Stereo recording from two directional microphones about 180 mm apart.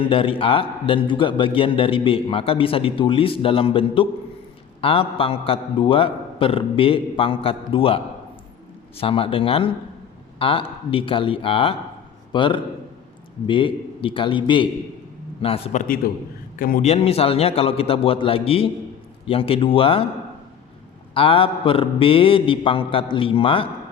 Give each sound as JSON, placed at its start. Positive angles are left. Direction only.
{"t": 0.0, "sound": "a man's voice", "side_deg": 30}
{"t": 16.8, "sound": "a man's voice", "side_deg": 35}
{"t": 21.1, "sound": "a man's voice", "side_deg": 30}